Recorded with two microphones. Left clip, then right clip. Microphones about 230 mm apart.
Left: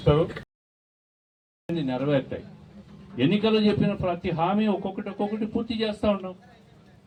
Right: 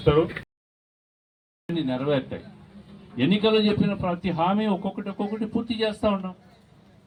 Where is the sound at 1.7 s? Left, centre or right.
Right.